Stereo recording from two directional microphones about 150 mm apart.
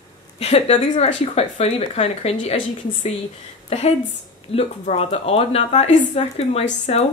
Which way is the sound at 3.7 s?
45° left (ahead or behind).